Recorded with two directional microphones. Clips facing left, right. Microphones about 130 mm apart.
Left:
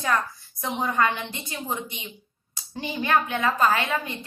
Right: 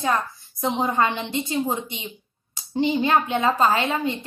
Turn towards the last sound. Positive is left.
turn(degrees=-25)  # may be behind; listen again after turning